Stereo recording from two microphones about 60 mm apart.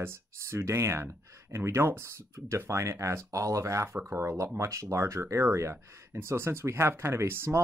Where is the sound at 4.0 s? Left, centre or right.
Right.